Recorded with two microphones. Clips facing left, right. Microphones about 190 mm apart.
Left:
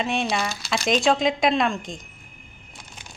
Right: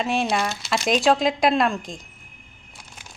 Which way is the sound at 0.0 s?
Centre (ahead or behind).